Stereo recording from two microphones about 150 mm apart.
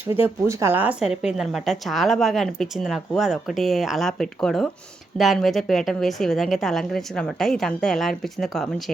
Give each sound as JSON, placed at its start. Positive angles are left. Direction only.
{"t": 0.1, "sound": "a woman's voice", "side_deg": -15}